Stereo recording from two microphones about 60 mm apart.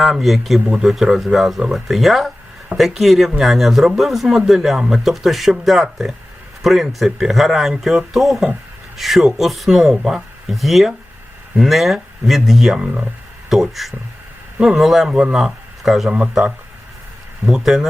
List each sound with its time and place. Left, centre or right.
0.0 s speech: centre
16.0 s speech: centre
17.4 s speech: centre